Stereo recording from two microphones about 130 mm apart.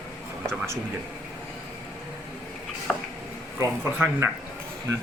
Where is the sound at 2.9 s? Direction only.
5° left (ahead or behind).